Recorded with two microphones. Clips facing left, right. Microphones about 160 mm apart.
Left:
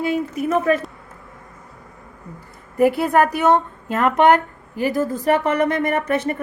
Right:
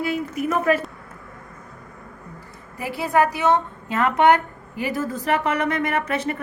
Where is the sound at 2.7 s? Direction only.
55° left (ahead or behind).